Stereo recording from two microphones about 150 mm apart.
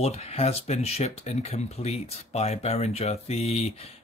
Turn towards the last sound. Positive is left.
turn(degrees=45)  # may be behind; listen again after turning